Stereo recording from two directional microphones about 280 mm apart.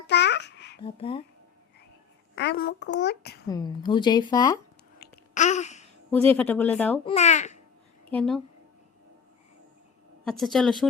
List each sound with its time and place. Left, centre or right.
0.1 s babbling: left
0.8 s a child's voice: centre
2.3 s a child's voice: left
3.5 s speech: centre
4.9 s babbling: left
6.1 s speech: centre
7.0 s a child's voice: left
8.1 s speech: centre
10.2 s speech: centre